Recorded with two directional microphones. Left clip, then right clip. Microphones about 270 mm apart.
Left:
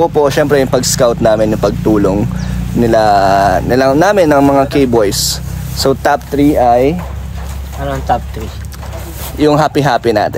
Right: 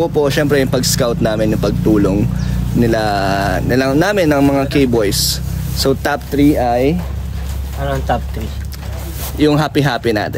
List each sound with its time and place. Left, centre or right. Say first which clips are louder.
0.2 s speech: left 2 dB; centre
7.8 s speech: left 3 dB; centre
9.4 s speech: left 4 dB; centre